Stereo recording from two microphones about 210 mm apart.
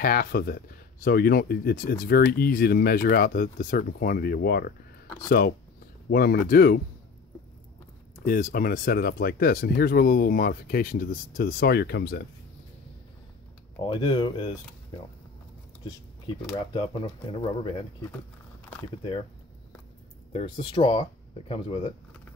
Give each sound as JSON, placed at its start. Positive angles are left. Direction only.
{"t": 0.0, "sound": "speech", "side_deg": 45}
{"t": 6.0, "sound": "speech", "side_deg": 45}
{"t": 8.3, "sound": "speech", "side_deg": 40}
{"t": 13.9, "sound": "speech", "side_deg": 20}
{"t": 16.7, "sound": "speech", "side_deg": 25}
{"t": 20.3, "sound": "speech", "side_deg": 25}